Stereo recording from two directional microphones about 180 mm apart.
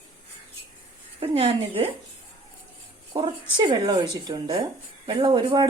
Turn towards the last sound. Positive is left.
turn(degrees=-25)  # may be behind; listen again after turning